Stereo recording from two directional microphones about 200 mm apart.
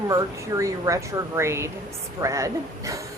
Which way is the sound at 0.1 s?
15° right (ahead or behind).